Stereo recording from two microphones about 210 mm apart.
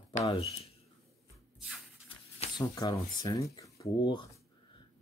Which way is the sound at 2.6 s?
15° left (ahead or behind).